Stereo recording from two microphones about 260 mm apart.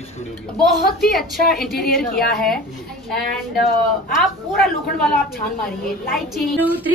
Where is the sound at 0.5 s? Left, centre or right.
Centre.